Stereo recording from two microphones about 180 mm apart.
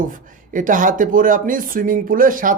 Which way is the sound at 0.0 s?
45° right (ahead or behind).